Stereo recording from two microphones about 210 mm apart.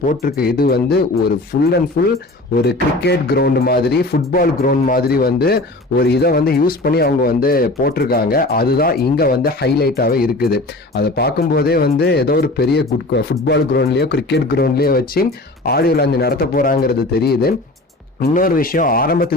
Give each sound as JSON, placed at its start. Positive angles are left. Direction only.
{"t": 0.0, "sound": "speech", "side_deg": 45}